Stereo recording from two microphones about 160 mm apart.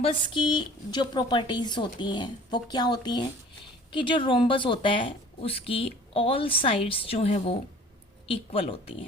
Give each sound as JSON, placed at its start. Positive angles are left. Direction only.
{"t": 0.0, "sound": "a woman's voice", "side_deg": 30}